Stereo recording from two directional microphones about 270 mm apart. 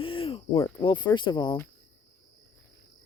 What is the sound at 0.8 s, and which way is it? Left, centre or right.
Speech, centre.